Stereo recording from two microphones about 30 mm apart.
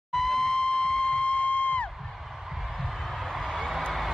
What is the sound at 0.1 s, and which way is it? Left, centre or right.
Emergency vehicle, centre.